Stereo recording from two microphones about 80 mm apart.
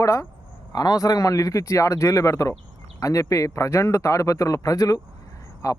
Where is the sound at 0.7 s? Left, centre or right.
Left.